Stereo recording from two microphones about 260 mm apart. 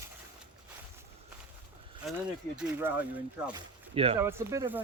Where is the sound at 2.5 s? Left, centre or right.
Centre.